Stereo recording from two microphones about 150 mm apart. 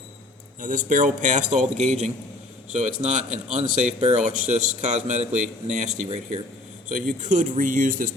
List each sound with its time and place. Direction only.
0.6 s a man's voice: 60° right (ahead or behind)